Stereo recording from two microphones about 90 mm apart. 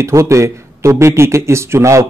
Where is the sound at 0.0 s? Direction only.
35° right (ahead or behind).